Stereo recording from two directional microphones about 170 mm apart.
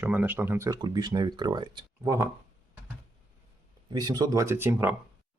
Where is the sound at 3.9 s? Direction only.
25° right (ahead or behind).